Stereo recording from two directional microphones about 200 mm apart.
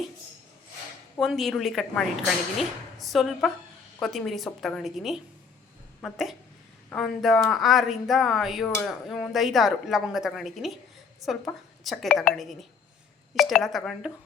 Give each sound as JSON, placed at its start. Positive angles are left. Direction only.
{"t": 1.2, "sound": "speech", "side_deg": 0}